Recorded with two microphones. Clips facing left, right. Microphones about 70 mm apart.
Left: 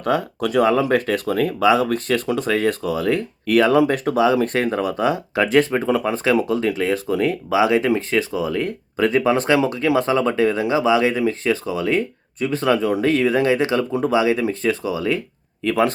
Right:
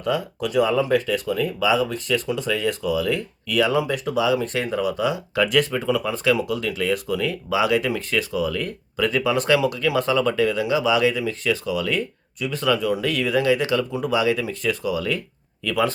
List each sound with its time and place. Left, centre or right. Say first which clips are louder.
0.0 s speech: left 3 dB; left